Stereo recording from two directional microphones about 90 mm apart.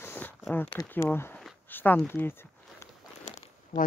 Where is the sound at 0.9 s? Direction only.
25° left (ahead or behind).